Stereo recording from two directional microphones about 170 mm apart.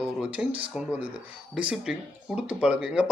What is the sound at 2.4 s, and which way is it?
Speech, 5° right (ahead or behind).